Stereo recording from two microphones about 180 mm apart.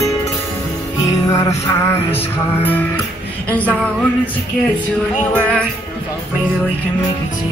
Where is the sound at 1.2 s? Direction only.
15° left (ahead or behind).